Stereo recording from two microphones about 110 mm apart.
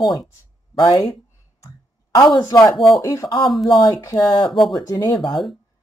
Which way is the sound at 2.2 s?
45° left (ahead or behind).